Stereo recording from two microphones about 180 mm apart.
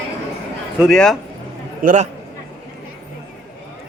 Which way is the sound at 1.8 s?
45° right (ahead or behind).